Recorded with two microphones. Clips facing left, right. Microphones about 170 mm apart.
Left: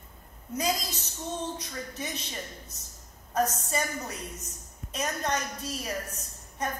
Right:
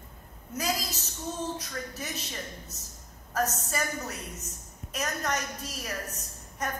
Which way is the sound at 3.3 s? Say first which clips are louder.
Left 2 dB; 30° left (ahead or behind).